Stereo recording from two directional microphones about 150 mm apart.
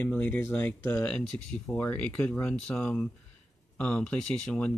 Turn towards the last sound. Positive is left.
turn(degrees=5)  # may be behind; listen again after turning